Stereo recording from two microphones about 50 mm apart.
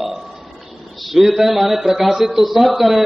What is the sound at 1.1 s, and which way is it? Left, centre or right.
A man's voice, centre.